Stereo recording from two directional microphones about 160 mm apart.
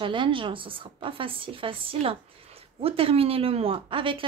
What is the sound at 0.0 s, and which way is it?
A woman's voice, 30° right (ahead or behind).